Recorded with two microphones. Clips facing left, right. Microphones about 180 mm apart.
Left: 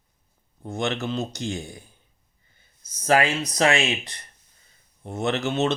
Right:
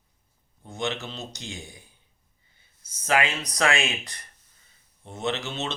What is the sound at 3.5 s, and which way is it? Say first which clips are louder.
Speech: left 3 dB; 30° left (ahead or behind).